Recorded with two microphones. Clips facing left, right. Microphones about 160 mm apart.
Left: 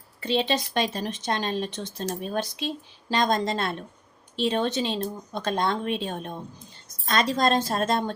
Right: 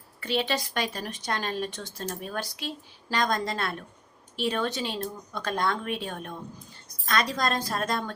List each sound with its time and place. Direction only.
0.2 s speech: 25° left (ahead or behind)